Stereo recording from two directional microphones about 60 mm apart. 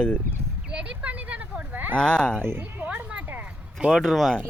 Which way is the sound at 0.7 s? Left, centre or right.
Right.